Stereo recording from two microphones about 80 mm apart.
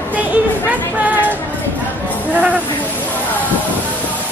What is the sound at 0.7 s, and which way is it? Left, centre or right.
Music, right.